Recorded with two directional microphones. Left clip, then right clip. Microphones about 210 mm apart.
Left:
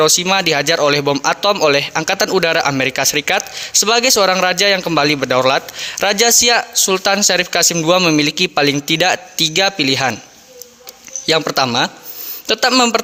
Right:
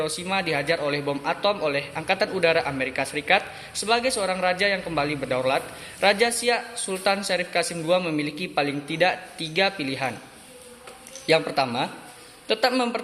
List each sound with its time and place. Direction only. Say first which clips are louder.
0.0 s a man's voice: left 13 dB; 55° left (ahead or behind)
11.3 s a man's voice: left 7 dB; 50° left (ahead or behind)